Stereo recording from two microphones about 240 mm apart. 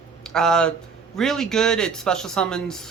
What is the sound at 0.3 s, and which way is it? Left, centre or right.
Speech, centre.